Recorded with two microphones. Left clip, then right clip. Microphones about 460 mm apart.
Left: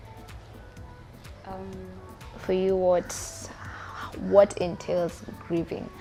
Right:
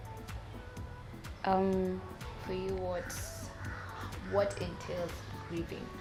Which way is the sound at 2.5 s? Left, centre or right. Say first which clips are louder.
Left 14 dB; left.